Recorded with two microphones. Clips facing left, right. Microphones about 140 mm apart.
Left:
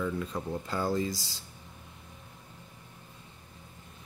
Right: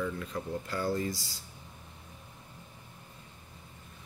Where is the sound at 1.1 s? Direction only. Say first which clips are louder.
Left 3 dB; 90° left.